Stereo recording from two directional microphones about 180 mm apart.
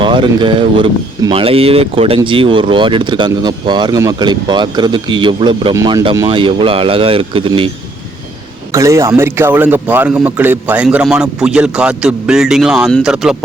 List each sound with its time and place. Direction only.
0.0 s speech: 25° right (ahead or behind)
8.7 s a man's voice: 15° right (ahead or behind)